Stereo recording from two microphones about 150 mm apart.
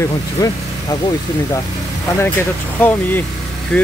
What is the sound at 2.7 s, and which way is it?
Speech, 10° left (ahead or behind).